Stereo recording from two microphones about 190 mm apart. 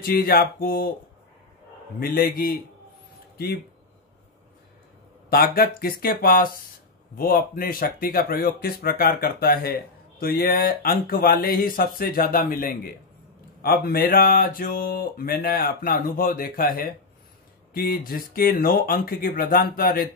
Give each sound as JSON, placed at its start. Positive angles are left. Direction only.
{"t": 0.0, "sound": "speech", "side_deg": 50}
{"t": 2.0, "sound": "speech", "side_deg": 50}
{"t": 5.3, "sound": "speech", "side_deg": 50}